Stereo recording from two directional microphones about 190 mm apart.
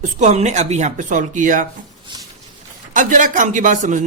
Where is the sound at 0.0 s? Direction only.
40° right (ahead or behind).